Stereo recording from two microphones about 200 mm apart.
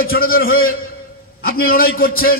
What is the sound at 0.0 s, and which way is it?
A man's voice, 50° left (ahead or behind).